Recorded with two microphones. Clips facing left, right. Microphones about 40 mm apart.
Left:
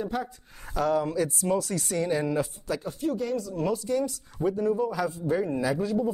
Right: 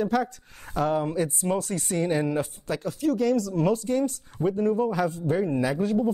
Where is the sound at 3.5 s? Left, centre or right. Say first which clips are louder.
Right 3 dB; right.